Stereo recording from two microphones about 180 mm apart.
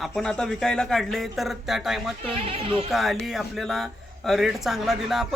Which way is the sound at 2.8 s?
Centre (ahead or behind).